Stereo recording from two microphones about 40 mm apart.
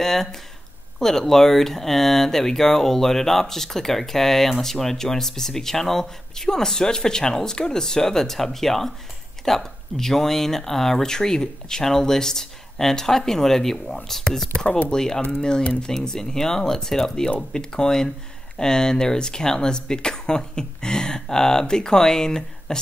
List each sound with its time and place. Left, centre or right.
0.0 s speech: centre